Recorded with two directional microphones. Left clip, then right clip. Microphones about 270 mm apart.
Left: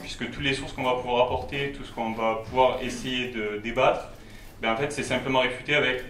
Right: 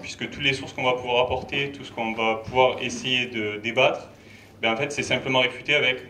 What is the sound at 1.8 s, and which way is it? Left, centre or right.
Speech, left.